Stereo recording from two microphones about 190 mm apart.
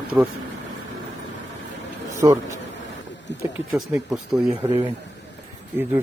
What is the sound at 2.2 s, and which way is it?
Speech, 15° right (ahead or behind).